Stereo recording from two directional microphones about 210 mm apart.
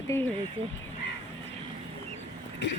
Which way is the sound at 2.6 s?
60° left (ahead or behind).